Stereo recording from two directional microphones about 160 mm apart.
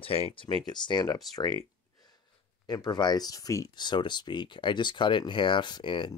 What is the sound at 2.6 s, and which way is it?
Speech, 25° left (ahead or behind).